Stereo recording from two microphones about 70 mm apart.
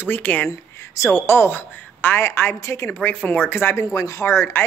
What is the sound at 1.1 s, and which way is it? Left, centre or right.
A woman's voice, left.